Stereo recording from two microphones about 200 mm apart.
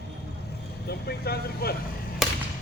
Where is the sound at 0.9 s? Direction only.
50° left (ahead or behind).